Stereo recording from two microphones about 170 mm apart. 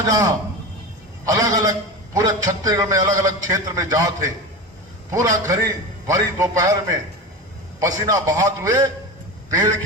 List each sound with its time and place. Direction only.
0.0 s a man's voice: 20° right (ahead or behind)